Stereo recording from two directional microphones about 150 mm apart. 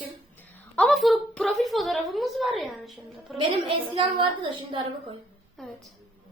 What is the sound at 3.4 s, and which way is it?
A woman's voice, 35° right (ahead or behind).